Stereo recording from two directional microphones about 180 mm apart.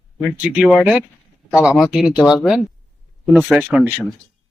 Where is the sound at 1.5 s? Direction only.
5° right (ahead or behind).